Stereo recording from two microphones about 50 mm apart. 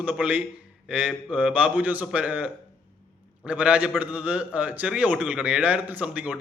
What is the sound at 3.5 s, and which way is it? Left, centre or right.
A man's voice, right.